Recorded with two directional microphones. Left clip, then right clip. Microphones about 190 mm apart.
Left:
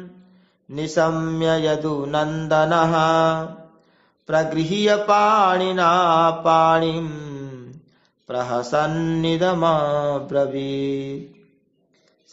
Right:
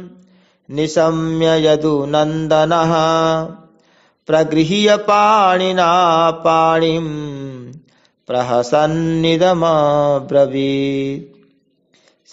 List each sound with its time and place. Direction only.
0.7 s mantra: 35° right (ahead or behind)